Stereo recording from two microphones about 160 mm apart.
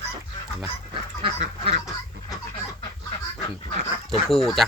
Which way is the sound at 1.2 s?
40° right (ahead or behind).